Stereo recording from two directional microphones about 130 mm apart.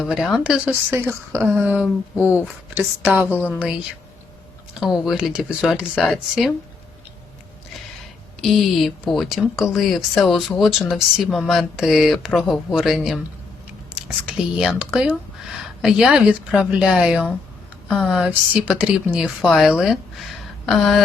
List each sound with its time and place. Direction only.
0.0 s speech: 5° right (ahead or behind)
0.9 s speech: 20° right (ahead or behind); by 6.5 s centre (ahead or behind)
8.4 s speech: centre (ahead or behind)